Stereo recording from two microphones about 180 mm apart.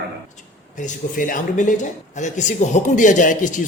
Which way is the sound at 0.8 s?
45° left (ahead or behind).